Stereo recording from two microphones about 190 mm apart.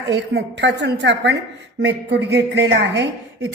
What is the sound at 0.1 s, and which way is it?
A woman's voice, 65° right (ahead or behind).